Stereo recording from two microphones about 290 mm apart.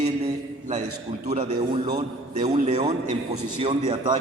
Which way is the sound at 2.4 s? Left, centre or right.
Right.